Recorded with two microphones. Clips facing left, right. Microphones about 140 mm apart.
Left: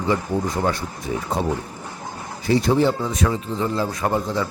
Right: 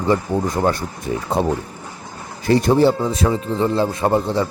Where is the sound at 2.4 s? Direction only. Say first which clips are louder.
Right 3 dB; 55° right (ahead or behind).